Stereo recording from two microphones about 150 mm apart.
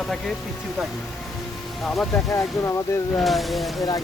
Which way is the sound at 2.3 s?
20° left (ahead or behind).